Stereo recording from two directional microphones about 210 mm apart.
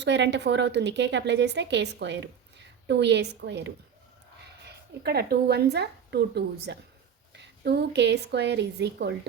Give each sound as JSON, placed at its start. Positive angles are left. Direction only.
{"t": 0.0, "sound": "a woman's voice", "side_deg": -55}